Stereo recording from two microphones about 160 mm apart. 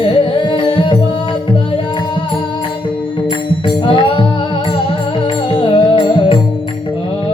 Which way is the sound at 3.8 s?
30° left (ahead or behind).